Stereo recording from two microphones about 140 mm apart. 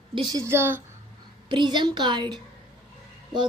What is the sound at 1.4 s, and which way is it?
A woman's voice, 35° right (ahead or behind).